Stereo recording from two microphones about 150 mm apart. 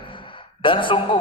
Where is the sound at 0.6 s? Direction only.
35° left (ahead or behind).